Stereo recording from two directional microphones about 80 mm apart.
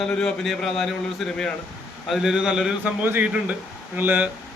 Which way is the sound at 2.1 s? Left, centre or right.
Centre.